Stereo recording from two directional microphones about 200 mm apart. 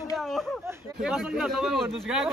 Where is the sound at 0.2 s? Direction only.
Centre (ahead or behind).